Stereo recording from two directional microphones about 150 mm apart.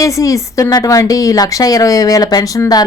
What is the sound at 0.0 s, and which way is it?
A woman's voice, 20° left (ahead or behind).